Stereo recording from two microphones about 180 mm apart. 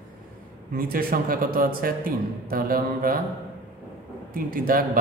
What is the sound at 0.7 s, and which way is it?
A man's voice, 55° right (ahead or behind).